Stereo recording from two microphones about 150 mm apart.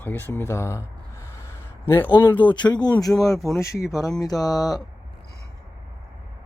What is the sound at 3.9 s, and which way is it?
Speech, 20° left (ahead or behind).